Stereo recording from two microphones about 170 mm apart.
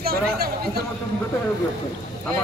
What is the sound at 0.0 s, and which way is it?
Speech, 65° right (ahead or behind).